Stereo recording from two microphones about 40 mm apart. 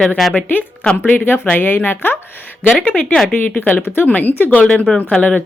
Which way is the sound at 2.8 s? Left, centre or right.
Left.